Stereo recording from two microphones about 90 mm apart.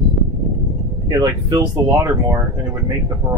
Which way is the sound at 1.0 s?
40° right (ahead or behind).